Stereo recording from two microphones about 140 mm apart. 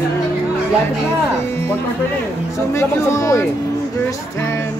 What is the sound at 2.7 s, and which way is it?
Speech, 20° left (ahead or behind).